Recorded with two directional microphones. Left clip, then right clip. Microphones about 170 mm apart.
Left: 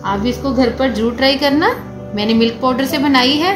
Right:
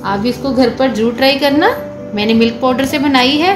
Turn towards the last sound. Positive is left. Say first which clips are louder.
# right 2 dB
turn(degrees=-20)  # may be behind; listen again after turning